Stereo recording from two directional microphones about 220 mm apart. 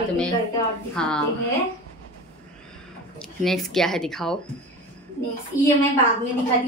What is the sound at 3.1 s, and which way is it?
Speech, centre (ahead or behind).